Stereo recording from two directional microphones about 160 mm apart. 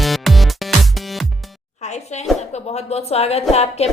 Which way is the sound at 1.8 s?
45° left (ahead or behind).